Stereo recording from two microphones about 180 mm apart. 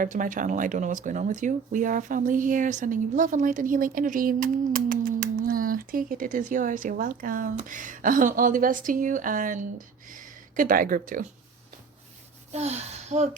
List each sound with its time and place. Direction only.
0.0 s speech: 45° right (ahead or behind)
12.5 s speech: 35° right (ahead or behind)